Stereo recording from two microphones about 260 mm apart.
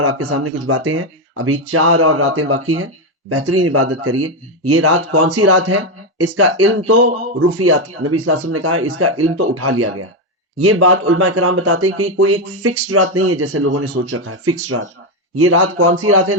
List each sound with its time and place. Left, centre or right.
0.0 s speech: right
0.7 s speech: right
1.7 s speech: right
15.4 s speech: right